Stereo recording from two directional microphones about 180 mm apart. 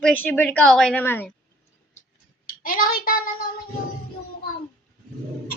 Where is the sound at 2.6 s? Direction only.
50° left (ahead or behind).